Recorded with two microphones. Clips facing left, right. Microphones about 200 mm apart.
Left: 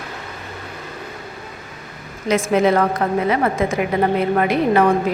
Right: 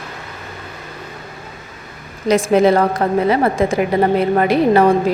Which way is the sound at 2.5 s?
35° right (ahead or behind).